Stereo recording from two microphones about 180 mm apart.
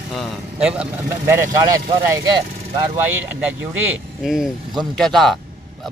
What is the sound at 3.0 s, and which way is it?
Speech, 10° right (ahead or behind).